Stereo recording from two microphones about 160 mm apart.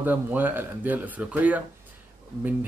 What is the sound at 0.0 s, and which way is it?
Speech, 10° right (ahead or behind).